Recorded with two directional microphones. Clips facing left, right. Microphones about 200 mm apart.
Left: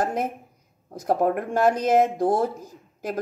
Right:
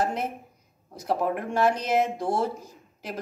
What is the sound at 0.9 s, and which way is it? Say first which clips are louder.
Speech: left 4 dB; 45° left (ahead or behind).